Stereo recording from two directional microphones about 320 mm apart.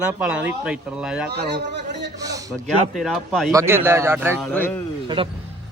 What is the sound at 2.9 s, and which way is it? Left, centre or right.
Speech, centre.